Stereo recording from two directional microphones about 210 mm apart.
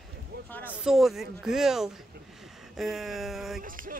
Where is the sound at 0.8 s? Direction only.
Centre (ahead or behind).